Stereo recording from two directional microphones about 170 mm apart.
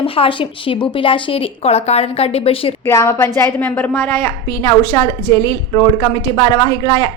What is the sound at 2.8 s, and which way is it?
A woman's voice, 15° left (ahead or behind).